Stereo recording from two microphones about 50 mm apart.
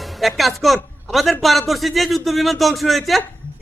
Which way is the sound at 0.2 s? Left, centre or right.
Centre.